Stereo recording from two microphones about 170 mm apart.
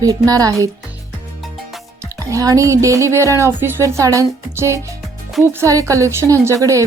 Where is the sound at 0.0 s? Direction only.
20° right (ahead or behind).